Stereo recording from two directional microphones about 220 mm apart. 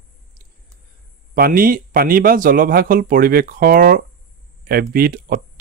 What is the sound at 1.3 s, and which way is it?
Speech, 40° right (ahead or behind).